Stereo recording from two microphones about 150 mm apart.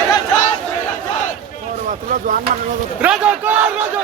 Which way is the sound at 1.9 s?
60° right (ahead or behind).